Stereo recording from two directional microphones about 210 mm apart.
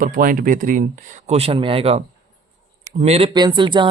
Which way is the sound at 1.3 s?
30° right (ahead or behind).